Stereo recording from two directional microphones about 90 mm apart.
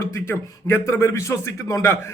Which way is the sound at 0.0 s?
30° left (ahead or behind).